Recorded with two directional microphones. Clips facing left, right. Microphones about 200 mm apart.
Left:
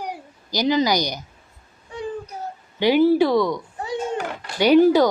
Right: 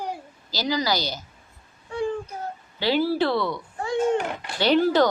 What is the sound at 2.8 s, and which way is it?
Speech, 20° left (ahead or behind).